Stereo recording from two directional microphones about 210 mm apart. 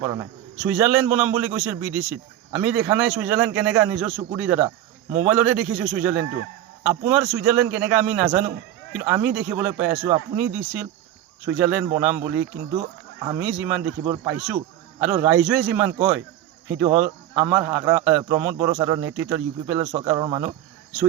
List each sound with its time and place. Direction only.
0.0 s speech: 15° right (ahead or behind)